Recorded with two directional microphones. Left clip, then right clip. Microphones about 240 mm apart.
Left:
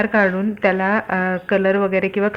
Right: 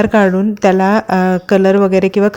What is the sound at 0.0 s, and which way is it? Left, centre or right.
A woman's voice, right.